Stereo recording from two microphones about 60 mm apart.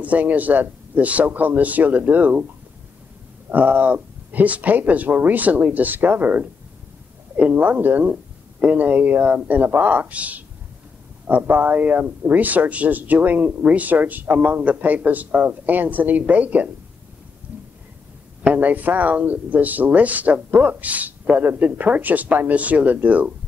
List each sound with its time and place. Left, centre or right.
0.0 s speech: right
3.4 s speech: right
18.5 s speech: right